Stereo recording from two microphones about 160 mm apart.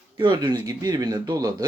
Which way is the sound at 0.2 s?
30° right (ahead or behind).